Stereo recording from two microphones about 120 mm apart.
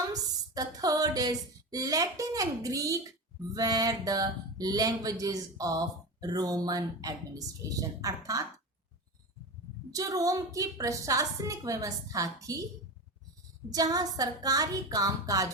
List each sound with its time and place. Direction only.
0.1 s speech: 30° right (ahead or behind)
9.9 s a woman's voice: 30° right (ahead or behind)
13.7 s speech: 30° right (ahead or behind)